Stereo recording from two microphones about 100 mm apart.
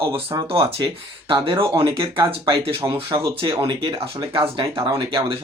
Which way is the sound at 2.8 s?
45° right (ahead or behind).